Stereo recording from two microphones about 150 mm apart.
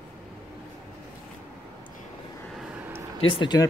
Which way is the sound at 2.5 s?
10° right (ahead or behind).